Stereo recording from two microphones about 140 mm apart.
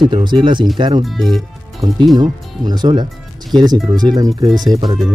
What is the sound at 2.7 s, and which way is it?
Speech, 30° right (ahead or behind).